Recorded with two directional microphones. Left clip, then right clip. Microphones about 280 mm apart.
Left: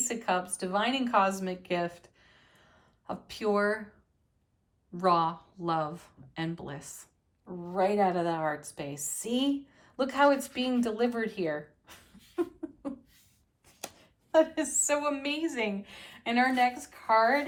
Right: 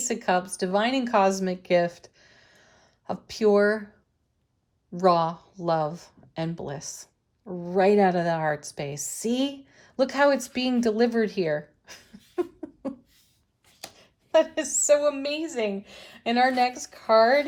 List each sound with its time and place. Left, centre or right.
0.0 s speech: right
4.9 s a woman's voice: centre
14.0 s a woman's voice: right